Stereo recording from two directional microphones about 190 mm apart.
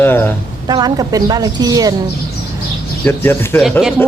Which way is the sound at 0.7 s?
20° right (ahead or behind).